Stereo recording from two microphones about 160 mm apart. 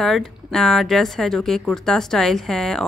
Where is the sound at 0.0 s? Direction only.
Centre (ahead or behind).